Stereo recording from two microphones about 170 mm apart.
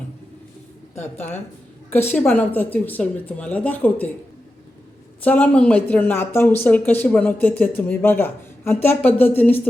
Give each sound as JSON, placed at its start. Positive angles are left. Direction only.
{"t": 1.9, "sound": "speech", "side_deg": 10}
{"t": 5.2, "sound": "speech", "side_deg": 10}